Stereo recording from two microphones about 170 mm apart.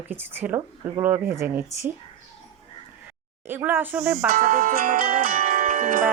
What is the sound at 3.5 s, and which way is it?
Speech, 10° right (ahead or behind).